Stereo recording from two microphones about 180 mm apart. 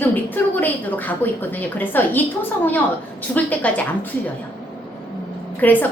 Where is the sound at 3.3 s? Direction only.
5° left (ahead or behind).